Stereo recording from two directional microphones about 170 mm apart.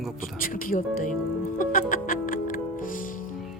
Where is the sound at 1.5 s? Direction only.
55° left (ahead or behind).